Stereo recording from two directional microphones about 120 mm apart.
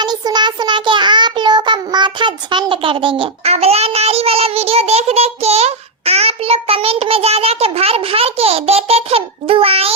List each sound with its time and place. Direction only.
0.0 s child singing: 35° right (ahead or behind); by 9.9 s 55° right (ahead or behind)